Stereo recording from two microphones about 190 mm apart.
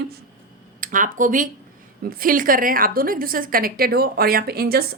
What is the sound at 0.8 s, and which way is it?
A woman's voice, 45° right (ahead or behind).